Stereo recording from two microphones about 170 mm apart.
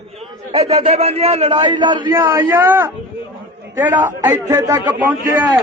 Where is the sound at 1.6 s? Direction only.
25° right (ahead or behind).